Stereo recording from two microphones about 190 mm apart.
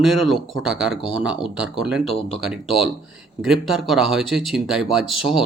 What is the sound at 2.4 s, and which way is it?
Speech, centre (ahead or behind).